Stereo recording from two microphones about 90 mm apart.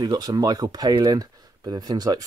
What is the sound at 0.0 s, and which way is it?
Speech, 50° right (ahead or behind).